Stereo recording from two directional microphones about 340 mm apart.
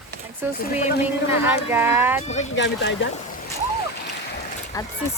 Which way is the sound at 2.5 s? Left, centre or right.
Left.